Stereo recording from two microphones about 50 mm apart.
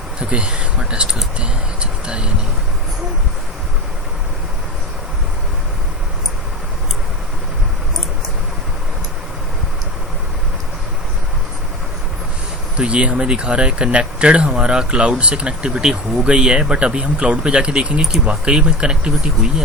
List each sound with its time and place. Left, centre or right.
0.2 s speech: centre
12.7 s speech: right